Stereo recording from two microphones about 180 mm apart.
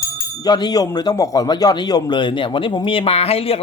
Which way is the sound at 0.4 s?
20° left (ahead or behind).